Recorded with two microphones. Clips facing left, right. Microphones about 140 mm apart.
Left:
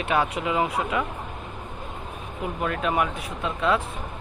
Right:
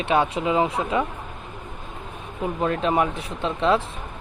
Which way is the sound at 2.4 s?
30° right (ahead or behind).